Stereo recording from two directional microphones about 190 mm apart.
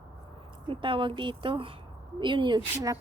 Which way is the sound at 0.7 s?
25° right (ahead or behind).